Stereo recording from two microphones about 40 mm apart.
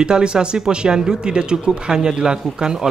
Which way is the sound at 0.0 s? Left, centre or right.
Right.